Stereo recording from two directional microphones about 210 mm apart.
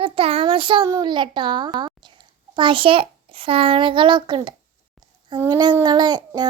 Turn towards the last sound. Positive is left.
turn(degrees=-20)  # may be behind; listen again after turning